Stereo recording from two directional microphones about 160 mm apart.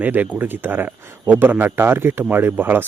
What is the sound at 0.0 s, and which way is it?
Speech, 10° right (ahead or behind).